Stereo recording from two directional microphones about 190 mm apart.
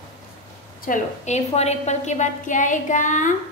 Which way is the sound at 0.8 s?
40° left (ahead or behind).